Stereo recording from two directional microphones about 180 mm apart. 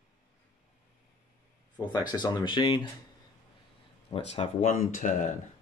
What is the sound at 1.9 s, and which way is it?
Speech, 25° left (ahead or behind).